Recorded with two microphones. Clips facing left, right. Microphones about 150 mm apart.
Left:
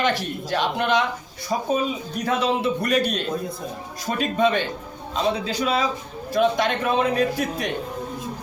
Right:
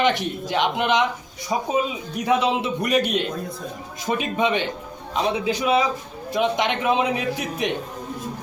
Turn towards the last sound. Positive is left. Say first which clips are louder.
# even
turn(degrees=-20)  # may be behind; listen again after turning